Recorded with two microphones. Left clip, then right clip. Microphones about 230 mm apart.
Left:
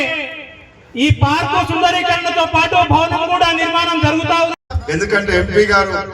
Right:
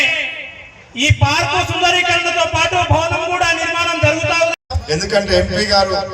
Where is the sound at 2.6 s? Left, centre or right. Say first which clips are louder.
Left 3 dB; left.